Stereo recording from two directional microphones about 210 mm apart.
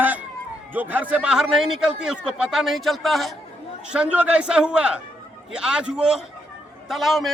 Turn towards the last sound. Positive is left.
turn(degrees=0)  # may be behind; listen again after turning